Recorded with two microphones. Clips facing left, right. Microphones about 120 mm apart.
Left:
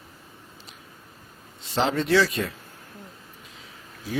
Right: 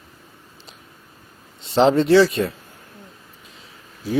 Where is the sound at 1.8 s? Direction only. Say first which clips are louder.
Right 8 dB; 30° right (ahead or behind).